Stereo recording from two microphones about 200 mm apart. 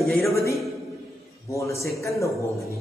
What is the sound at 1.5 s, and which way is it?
Speech, 15° left (ahead or behind).